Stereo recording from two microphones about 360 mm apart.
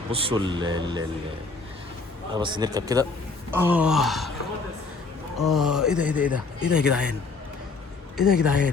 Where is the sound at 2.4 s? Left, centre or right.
Centre.